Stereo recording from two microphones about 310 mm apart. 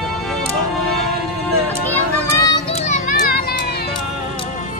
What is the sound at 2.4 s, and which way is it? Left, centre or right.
Children playing, centre.